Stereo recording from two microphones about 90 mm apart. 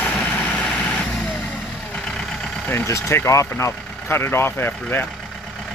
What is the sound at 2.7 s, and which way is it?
Speech, 30° left (ahead or behind).